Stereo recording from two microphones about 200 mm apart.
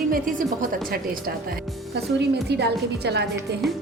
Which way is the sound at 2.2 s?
55° right (ahead or behind).